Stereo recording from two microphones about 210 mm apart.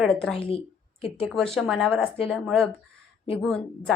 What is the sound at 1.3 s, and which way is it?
Speech, centre (ahead or behind).